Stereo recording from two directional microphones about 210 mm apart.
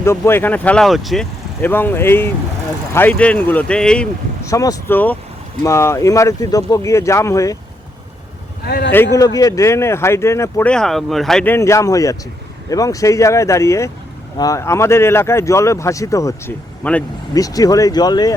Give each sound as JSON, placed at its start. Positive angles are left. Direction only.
{"t": 0.0, "sound": "speech", "side_deg": 10}
{"t": 4.4, "sound": "speech", "side_deg": 15}
{"t": 8.6, "sound": "speech", "side_deg": 50}
{"t": 9.1, "sound": "speech", "side_deg": 15}